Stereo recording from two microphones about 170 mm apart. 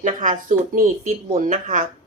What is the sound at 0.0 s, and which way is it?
Speech, 50° right (ahead or behind).